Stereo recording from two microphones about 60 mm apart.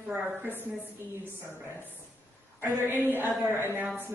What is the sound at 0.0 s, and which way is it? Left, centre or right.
A woman's voice, right.